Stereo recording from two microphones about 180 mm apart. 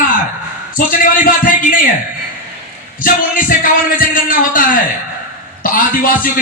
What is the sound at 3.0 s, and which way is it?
A man's voice, 50° left (ahead or behind).